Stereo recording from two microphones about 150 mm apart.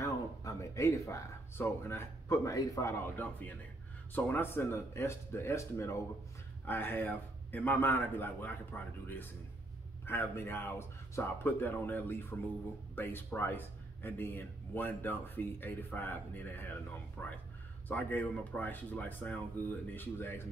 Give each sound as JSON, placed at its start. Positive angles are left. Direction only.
{"t": 0.0, "sound": "a man's voice", "side_deg": 20}